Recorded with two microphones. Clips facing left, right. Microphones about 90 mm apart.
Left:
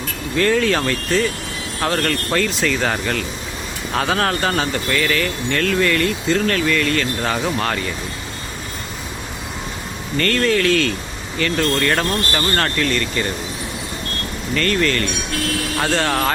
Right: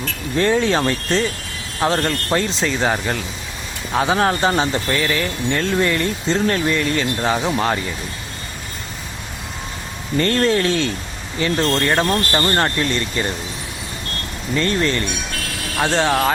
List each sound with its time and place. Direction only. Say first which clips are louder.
0.3 s speech: even; 25° right (ahead or behind)
10.3 s speech: left 2 dB; 30° right (ahead or behind)
14.5 s speech: even; 25° right (ahead or behind)